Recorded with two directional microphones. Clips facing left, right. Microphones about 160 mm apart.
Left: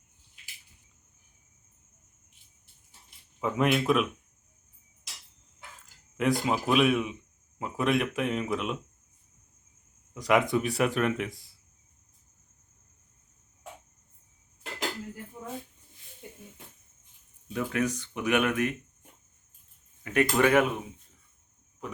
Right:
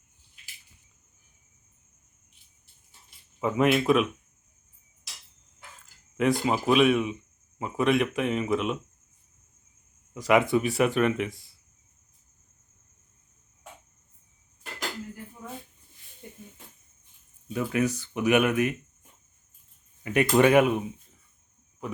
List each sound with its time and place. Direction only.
3.4 s speech: centre (ahead or behind)
6.1 s speech: centre (ahead or behind)
10.2 s speech: centre (ahead or behind)
17.5 s speech: 5° right (ahead or behind)
20.1 s speech: 15° right (ahead or behind)